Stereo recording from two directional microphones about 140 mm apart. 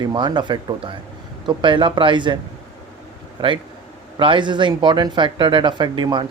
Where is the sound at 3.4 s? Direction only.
30° right (ahead or behind).